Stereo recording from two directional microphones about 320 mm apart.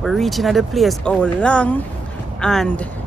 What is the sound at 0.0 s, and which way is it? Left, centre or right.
Speech, centre.